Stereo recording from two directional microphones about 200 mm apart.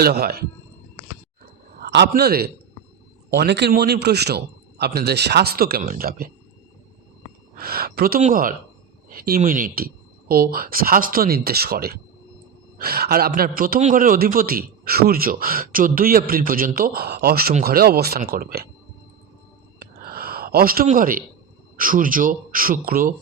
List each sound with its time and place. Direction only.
0.0 s a man's voice: 50° right (ahead or behind)
1.7 s a man's voice: 55° right (ahead or behind)
7.5 s a man's voice: 50° right (ahead or behind)
19.8 s a sound: 50° right (ahead or behind)
20.8 s a man's voice: 45° right (ahead or behind)